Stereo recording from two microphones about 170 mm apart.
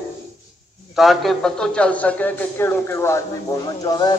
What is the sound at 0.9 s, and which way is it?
A man's voice, centre (ahead or behind).